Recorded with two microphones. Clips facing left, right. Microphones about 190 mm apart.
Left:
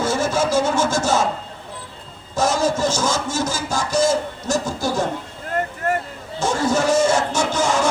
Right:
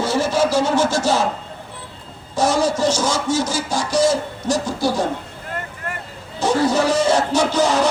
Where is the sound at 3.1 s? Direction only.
45° left (ahead or behind).